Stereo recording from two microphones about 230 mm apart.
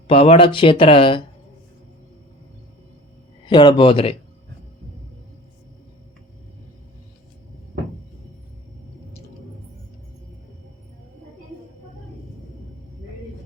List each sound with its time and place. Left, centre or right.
0.1 s speech: left
3.4 s speech: centre